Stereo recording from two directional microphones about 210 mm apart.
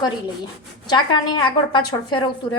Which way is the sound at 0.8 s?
20° left (ahead or behind).